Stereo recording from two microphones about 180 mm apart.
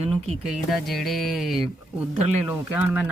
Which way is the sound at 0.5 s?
Centre (ahead or behind).